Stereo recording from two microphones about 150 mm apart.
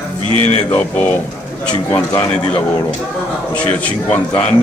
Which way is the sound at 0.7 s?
10° left (ahead or behind).